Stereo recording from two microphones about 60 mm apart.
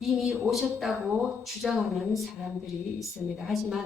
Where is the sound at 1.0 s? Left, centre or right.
Right.